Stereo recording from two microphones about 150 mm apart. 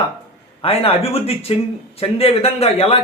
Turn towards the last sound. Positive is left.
turn(degrees=40)  # may be behind; listen again after turning